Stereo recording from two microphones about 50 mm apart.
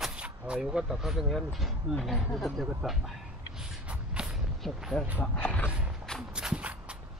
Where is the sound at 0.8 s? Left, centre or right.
Centre.